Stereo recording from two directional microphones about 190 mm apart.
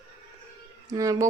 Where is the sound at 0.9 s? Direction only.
15° right (ahead or behind).